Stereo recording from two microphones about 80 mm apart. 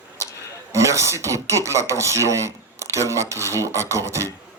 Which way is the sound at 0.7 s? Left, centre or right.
Right.